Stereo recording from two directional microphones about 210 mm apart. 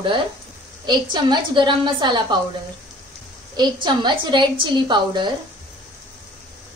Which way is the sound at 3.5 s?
20° right (ahead or behind).